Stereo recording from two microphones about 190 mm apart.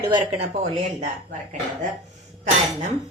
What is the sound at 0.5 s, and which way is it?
Speech, 35° right (ahead or behind).